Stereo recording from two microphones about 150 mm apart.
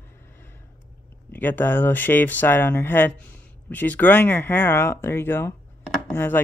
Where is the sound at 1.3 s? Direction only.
15° left (ahead or behind).